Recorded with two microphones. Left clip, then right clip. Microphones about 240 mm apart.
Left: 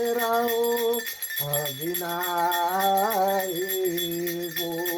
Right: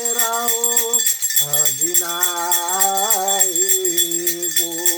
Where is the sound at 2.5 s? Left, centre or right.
Right.